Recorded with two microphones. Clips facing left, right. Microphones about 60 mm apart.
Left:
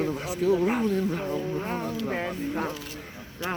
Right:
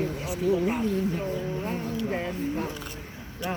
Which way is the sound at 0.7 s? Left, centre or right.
Left.